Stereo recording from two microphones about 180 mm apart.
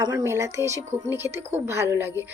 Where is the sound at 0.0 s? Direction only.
20° right (ahead or behind).